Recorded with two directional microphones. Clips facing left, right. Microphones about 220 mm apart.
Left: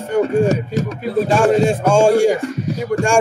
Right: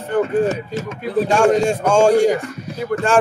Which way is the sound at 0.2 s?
40° left (ahead or behind).